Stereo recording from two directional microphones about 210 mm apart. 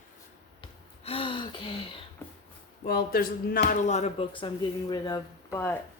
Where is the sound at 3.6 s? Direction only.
35° left (ahead or behind); by 5.8 s 10° left (ahead or behind).